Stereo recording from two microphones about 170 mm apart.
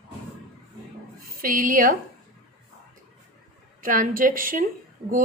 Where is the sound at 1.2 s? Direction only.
55° right (ahead or behind).